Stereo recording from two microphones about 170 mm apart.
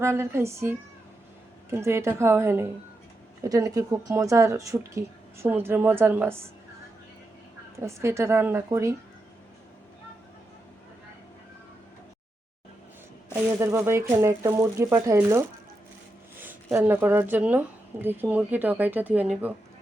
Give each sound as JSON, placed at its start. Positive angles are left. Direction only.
{"t": 0.0, "sound": "speech", "side_deg": -15}
{"t": 1.7, "sound": "speech", "side_deg": -15}
{"t": 7.8, "sound": "speech", "side_deg": -15}
{"t": 13.3, "sound": "speech", "side_deg": -15}